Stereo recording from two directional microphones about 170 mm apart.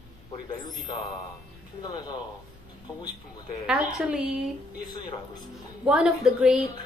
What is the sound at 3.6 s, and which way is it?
Speech, 5° right (ahead or behind).